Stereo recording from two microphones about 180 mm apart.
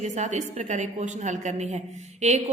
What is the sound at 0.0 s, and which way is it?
A woman's voice, 40° right (ahead or behind).